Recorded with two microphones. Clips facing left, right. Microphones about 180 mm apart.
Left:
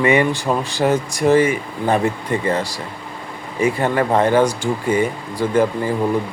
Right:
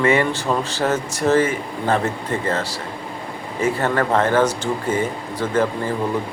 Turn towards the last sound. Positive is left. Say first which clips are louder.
# left 3 dB
turn(degrees=15)  # may be behind; listen again after turning